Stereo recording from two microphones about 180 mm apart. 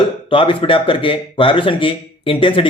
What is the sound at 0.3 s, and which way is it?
A man's voice, 30° left (ahead or behind).